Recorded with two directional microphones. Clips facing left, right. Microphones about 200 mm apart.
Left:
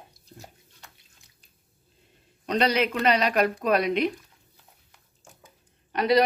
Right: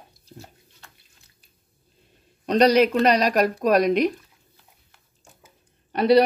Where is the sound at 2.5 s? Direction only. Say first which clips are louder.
Right 7 dB; 40° right (ahead or behind).